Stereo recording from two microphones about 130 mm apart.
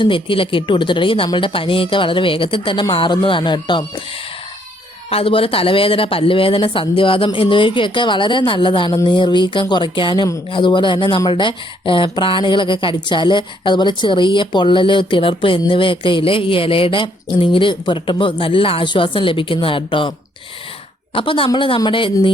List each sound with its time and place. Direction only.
0.0 s speech: 40° left (ahead or behind)
5.0 s speech: 45° left (ahead or behind)